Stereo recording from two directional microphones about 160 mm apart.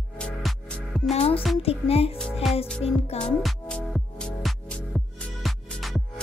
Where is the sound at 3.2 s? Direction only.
5° left (ahead or behind).